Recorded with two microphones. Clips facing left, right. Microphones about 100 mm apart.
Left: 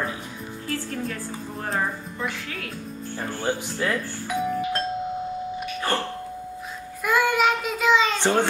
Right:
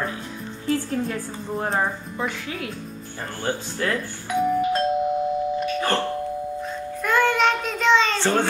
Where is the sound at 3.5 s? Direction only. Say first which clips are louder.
Right 1 dB; 10° left (ahead or behind).